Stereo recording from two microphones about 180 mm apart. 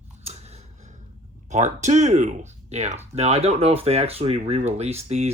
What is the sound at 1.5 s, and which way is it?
Speech, 40° right (ahead or behind).